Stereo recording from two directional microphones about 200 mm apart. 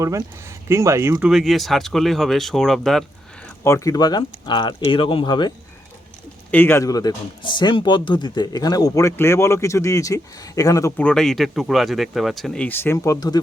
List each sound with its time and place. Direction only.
0.0 s speech: 15° right (ahead or behind)
1.3 s speech: centre (ahead or behind)
3.6 s speech: 15° left (ahead or behind)
6.5 s speech: 10° left (ahead or behind)